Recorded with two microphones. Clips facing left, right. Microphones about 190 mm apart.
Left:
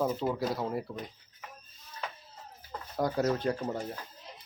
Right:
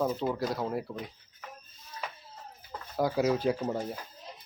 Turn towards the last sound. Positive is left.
turn(degrees=-5)  # may be behind; listen again after turning